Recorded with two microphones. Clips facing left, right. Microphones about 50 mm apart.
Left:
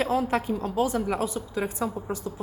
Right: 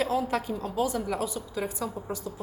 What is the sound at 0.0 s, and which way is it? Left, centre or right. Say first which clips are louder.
A woman's voice: left 2 dB; left.